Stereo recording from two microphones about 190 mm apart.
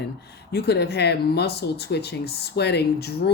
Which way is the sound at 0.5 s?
60° left (ahead or behind).